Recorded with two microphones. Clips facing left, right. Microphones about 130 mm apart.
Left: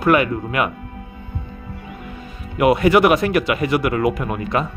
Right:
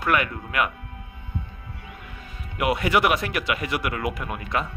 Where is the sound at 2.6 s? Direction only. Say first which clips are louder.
Left 8 dB; 35° left (ahead or behind).